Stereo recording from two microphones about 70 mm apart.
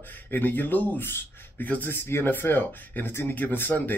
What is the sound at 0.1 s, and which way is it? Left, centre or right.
Speech, left.